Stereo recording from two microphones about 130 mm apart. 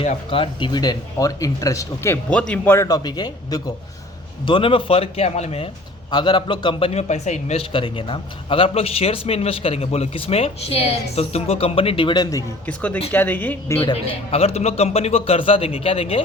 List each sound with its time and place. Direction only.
0.3 s speech: 40° left (ahead or behind); by 2.1 s 25° left (ahead or behind)
2.3 s speech: 10° left (ahead or behind)
2.8 s a man's voice: 30° left (ahead or behind); by 5.7 s 50° left (ahead or behind)
6.1 s speech: 35° left (ahead or behind)
7.1 s a man's voice: 60° left (ahead or behind); by 12.5 s 30° left (ahead or behind)
12.6 s speech: 10° left (ahead or behind)
13.8 s a man's voice: 50° left (ahead or behind)